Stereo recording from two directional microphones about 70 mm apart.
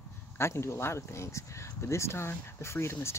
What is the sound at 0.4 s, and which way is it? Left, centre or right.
Speech, left.